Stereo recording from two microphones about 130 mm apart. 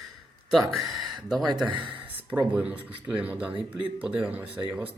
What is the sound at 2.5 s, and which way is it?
Speech, 10° right (ahead or behind).